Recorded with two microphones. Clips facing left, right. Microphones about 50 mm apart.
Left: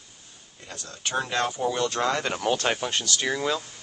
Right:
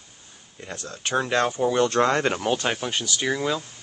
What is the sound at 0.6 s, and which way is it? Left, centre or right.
Speech, right.